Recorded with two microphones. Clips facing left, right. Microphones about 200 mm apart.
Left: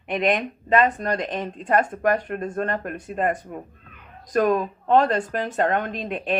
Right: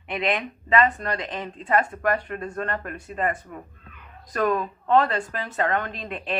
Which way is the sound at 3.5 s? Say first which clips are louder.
Left 4 dB; 30° left (ahead or behind).